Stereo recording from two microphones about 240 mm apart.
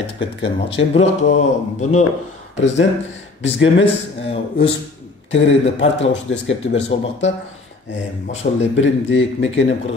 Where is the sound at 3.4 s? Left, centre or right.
Left.